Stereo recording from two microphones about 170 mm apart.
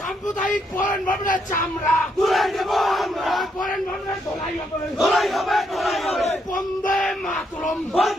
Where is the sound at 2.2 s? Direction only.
Centre (ahead or behind).